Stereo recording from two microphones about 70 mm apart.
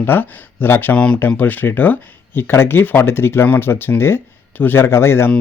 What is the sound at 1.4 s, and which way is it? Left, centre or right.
Speech, left.